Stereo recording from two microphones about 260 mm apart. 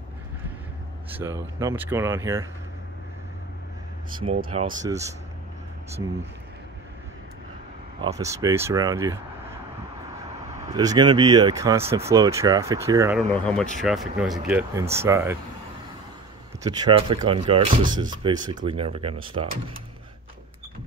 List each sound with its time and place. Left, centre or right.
1.1 s speech: centre
4.5 s speech: right
4.8 s speech: centre
8.0 s speech: centre
10.7 s speech: centre
13.3 s speech: centre
16.6 s speech: centre